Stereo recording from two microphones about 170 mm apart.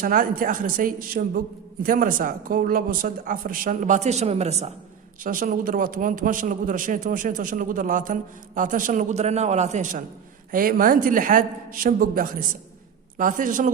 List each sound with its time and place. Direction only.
0.0 s a woman's voice: 55° right (ahead or behind)
5.2 s a man's voice: 55° right (ahead or behind)
10.5 s a woman's voice: 55° right (ahead or behind)